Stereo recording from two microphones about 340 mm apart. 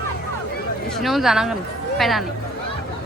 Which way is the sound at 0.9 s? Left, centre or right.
Centre.